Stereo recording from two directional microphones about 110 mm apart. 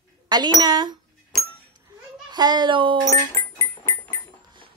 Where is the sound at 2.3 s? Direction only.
40° right (ahead or behind).